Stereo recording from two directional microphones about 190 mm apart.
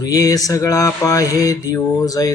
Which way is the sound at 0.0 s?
20° left (ahead or behind).